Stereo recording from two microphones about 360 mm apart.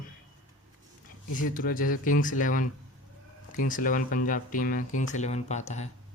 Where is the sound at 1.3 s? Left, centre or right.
Left.